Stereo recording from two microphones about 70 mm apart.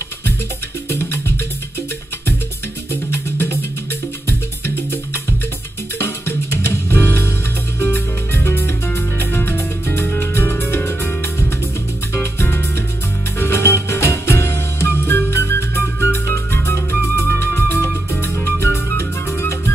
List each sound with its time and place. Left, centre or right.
5.9 s music: left